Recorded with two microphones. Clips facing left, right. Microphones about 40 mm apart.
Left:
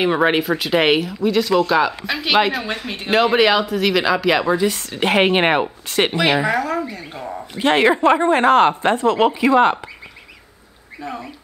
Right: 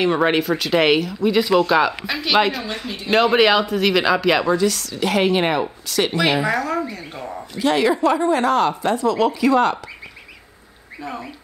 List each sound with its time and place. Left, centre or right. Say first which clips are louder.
0.0 s speech: left 1 dB; centre
1.2 s a man's voice: right 1 dB; centre
4.6 s speech: even; left
6.1 s speech: left 1 dB; centre
7.5 s speech: left 3 dB; left
9.3 s speech: left 2 dB; left
11.0 s speech: left 1 dB; centre